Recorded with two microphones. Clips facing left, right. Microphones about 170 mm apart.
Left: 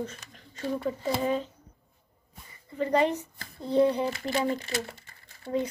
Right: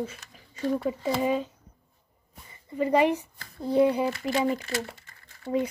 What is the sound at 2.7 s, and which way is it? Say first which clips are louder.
Speech: right 2 dB; 10° right (ahead or behind).